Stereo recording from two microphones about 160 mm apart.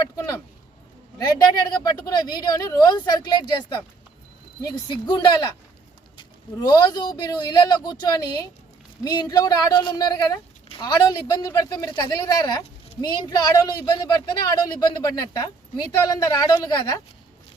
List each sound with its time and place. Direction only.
0.0 s speech: 20° left (ahead or behind)